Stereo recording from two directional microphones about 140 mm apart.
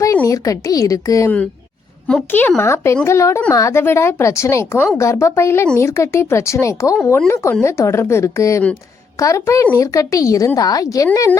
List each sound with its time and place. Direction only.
0.0 s a woman's voice: 20° left (ahead or behind)
2.0 s a woman's voice: 10° left (ahead or behind)